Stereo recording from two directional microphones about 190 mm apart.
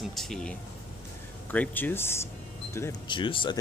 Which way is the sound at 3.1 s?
25° left (ahead or behind).